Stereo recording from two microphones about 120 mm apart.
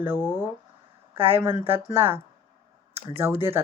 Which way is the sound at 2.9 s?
55° right (ahead or behind).